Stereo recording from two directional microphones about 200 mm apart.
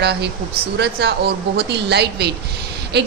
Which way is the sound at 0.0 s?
55° right (ahead or behind).